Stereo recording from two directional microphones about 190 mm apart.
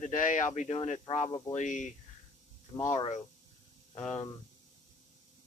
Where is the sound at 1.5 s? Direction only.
40° left (ahead or behind).